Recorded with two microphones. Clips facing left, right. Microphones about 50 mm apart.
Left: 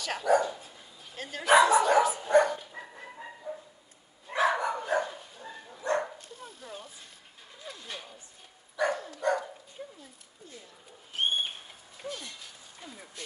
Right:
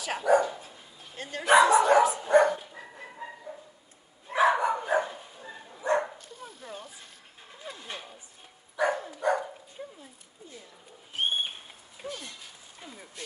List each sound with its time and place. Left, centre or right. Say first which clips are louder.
0.0 s dog: right 2 dB; centre
2.8 s music: right 2 dB; centre
4.3 s dog: right 4 dB; centre
6.3 s dog: right 1 dB; right
7.6 s a sound: right 2 dB; right
8.7 s dog: right 2 dB; centre
12.0 s a sound: even; centre
12.8 s vehicle: right 1 dB; centre